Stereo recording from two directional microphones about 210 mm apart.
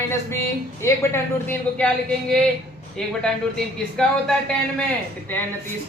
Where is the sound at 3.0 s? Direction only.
5° left (ahead or behind).